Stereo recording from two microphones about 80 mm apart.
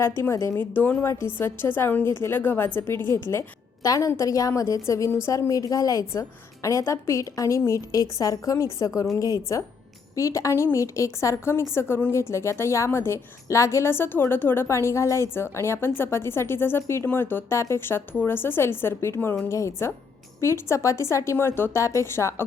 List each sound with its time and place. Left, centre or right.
0.2 s a woman's voice: left
3.8 s a woman's voice: left